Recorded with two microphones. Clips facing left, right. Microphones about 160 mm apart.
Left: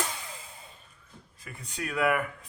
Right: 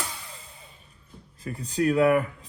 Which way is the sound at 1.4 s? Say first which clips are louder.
Right 13 dB; 35° right (ahead or behind).